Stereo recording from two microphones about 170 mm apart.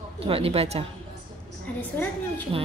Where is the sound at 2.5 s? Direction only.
30° right (ahead or behind).